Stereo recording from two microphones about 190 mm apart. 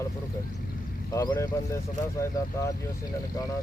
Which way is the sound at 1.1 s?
20° left (ahead or behind).